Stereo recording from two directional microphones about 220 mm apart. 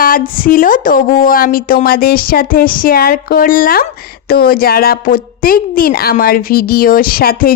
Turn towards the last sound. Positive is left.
turn(degrees=40)  # may be behind; listen again after turning